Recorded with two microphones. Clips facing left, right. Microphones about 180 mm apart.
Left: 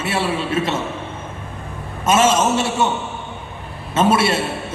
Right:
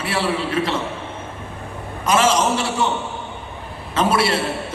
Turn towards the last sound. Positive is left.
turn(degrees=25)  # may be behind; listen again after turning